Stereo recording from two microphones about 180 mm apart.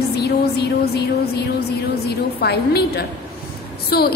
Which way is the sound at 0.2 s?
65° left (ahead or behind).